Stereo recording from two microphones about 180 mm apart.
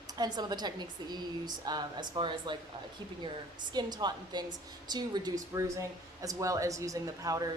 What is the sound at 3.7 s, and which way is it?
Speech, 25° right (ahead or behind).